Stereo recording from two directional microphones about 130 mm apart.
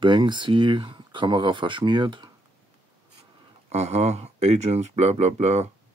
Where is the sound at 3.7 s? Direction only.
55° right (ahead or behind).